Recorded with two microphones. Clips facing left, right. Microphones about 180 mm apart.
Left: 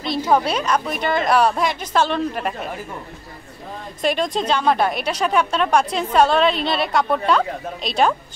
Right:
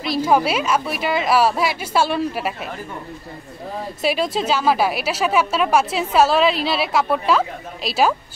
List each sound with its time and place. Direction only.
0.0 s a woman's voice: 5° right (ahead or behind)
4.0 s a woman's voice: 5° right (ahead or behind)